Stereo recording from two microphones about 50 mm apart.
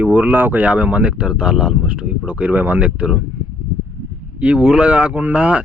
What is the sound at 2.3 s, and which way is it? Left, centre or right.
Speech, right.